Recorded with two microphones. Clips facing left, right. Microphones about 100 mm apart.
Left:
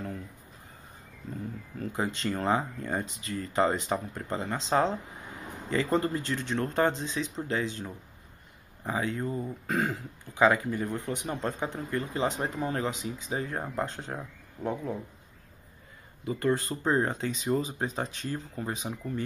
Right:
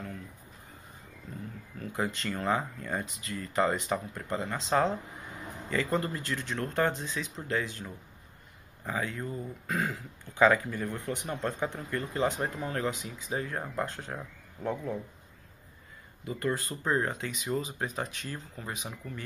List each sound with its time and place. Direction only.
1.9 s speech: 25° left (ahead or behind)
16.3 s speech: 25° left (ahead or behind)